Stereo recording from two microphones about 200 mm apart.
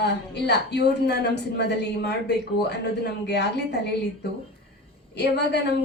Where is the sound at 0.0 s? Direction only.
55° left (ahead or behind).